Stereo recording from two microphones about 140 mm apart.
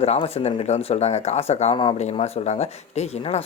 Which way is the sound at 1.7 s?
40° left (ahead or behind).